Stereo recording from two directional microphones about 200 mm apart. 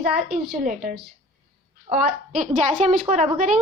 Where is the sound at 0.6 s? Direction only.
45° right (ahead or behind).